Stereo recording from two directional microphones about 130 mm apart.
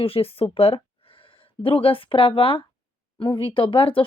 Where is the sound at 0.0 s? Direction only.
45° left (ahead or behind).